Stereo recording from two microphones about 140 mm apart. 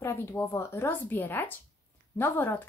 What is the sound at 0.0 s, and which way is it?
Speech, 20° left (ahead or behind).